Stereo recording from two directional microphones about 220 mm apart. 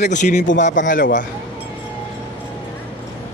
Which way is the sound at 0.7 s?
35° left (ahead or behind).